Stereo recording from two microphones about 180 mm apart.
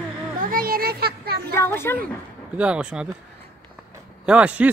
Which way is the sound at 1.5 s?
15° left (ahead or behind).